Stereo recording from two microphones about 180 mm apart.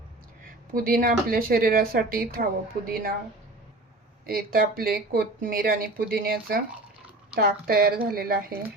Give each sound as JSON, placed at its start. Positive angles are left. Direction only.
{"t": 0.7, "sound": "speech", "side_deg": -50}
{"t": 4.3, "sound": "speech", "side_deg": -55}